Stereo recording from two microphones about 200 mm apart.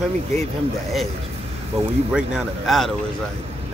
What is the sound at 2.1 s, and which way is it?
Speech, centre (ahead or behind).